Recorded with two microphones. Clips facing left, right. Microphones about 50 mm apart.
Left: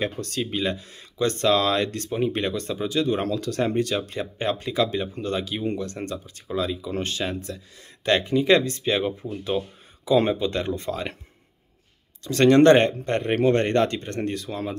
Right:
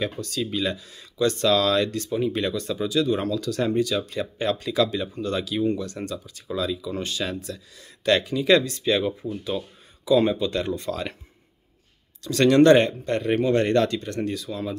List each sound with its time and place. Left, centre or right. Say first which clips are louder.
0.0 s speech: even; left
12.2 s speech: left 1 dB; left